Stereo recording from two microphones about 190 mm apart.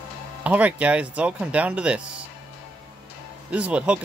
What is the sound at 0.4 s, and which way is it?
Speech, 10° right (ahead or behind).